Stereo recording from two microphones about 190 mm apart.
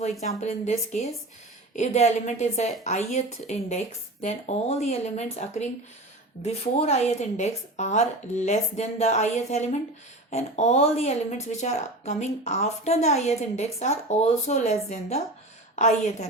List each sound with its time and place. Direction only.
0.4 s speech: 35° left (ahead or behind)